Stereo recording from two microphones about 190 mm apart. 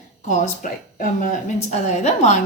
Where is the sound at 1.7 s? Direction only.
35° left (ahead or behind).